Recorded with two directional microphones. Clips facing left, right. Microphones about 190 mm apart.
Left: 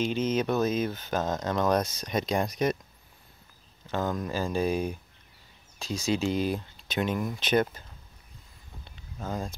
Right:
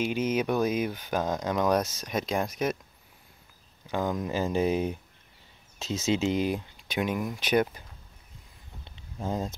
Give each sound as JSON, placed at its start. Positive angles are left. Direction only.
{"t": 0.0, "sound": "speech", "side_deg": -10}
{"t": 3.8, "sound": "speech", "side_deg": -15}
{"t": 8.8, "sound": "a sound", "side_deg": -25}